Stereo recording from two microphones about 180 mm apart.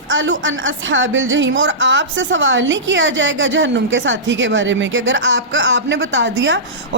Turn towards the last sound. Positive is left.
turn(degrees=-90)